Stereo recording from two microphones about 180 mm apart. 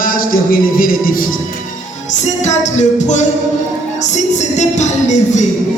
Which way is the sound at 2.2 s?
40° left (ahead or behind).